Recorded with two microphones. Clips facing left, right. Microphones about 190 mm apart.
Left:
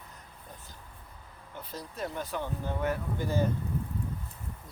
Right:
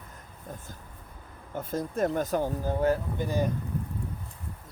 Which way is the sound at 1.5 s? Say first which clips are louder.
Right 10 dB; 50° right (ahead or behind).